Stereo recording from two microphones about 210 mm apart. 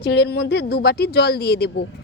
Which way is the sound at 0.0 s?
50° left (ahead or behind).